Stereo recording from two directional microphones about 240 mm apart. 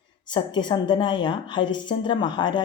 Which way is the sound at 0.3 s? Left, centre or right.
Centre.